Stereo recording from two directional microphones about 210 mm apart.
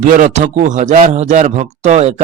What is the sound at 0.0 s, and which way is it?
A man's voice, 35° right (ahead or behind).